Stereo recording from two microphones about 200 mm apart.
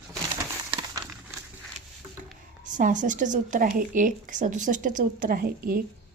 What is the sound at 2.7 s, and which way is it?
A woman's voice, 40° right (ahead or behind).